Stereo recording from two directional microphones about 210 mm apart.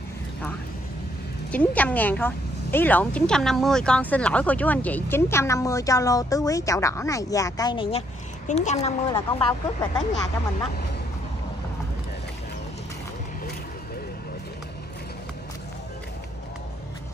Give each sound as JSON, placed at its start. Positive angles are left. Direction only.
{"t": 1.5, "sound": "a woman's voice", "side_deg": 5}
{"t": 9.1, "sound": "a woman's voice", "side_deg": 15}